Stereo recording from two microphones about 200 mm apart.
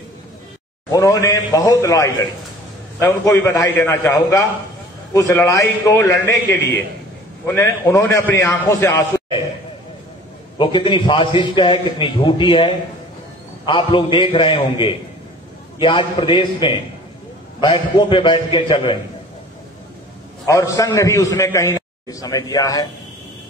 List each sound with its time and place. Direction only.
0.9 s a man's voice: 15° left (ahead or behind)
7.4 s a man's voice: 15° left (ahead or behind)
10.6 s a man's voice: 25° left (ahead or behind)
20.4 s a man's voice: 15° left (ahead or behind)